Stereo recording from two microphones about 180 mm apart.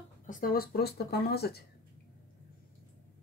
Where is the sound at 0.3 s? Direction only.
55° left (ahead or behind).